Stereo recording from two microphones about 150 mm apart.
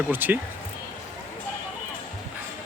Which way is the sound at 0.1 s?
10° right (ahead or behind).